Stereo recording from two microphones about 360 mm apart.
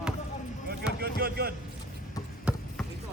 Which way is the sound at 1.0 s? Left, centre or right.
Right.